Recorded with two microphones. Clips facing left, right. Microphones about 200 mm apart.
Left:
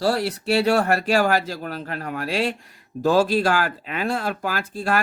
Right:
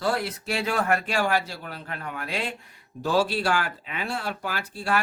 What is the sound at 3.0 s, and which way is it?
Speech, 45° left (ahead or behind).